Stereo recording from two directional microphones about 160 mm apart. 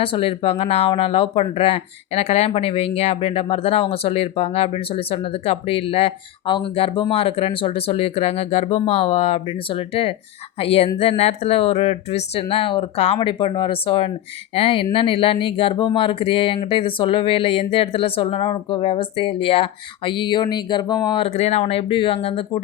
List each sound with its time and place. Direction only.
0.0 s speech: 35° left (ahead or behind)
21.2 s speech: 40° left (ahead or behind)